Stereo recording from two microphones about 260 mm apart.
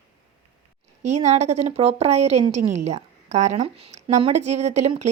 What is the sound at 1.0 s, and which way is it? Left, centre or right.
A woman's voice, right.